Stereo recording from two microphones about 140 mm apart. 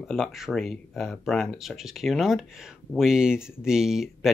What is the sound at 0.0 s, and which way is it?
Speech, centre (ahead or behind).